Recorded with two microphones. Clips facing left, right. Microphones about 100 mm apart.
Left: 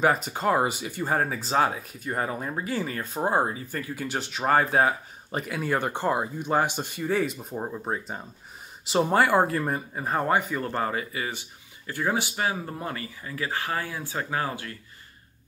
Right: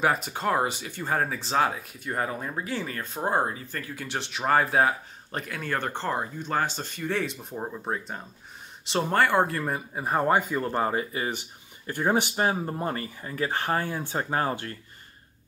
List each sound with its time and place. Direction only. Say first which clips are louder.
0.0 s speech: left 2 dB; centre (ahead or behind)
9.9 s speech: right 2 dB; 15° right (ahead or behind)
12.4 s speech: right 3 dB; 35° right (ahead or behind)